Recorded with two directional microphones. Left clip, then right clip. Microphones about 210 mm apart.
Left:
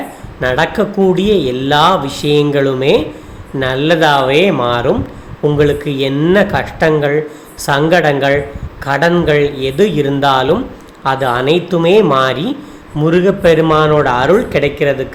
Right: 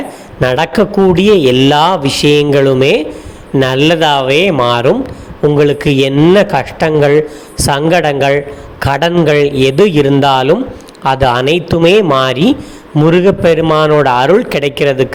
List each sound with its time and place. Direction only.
0.3 s a man's voice: 35° right (ahead or behind)